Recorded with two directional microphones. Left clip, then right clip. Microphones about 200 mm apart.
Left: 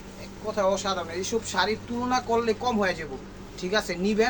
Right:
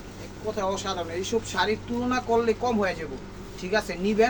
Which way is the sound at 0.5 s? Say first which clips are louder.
Left 4 dB; 25° left (ahead or behind).